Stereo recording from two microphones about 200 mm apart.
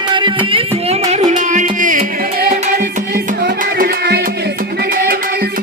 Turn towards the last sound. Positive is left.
turn(degrees=-55)  # may be behind; listen again after turning